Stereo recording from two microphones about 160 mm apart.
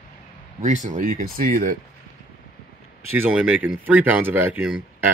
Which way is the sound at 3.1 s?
10° right (ahead or behind).